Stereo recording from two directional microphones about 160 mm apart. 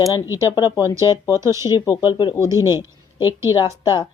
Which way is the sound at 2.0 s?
25° left (ahead or behind).